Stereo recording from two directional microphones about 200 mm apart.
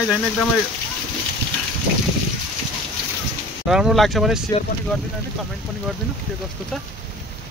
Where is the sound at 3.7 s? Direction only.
Centre (ahead or behind).